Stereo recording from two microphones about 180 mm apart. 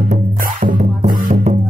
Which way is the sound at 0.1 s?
45° right (ahead or behind).